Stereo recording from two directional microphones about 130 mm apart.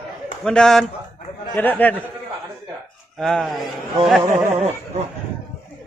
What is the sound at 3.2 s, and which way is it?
Speech, 5° left (ahead or behind).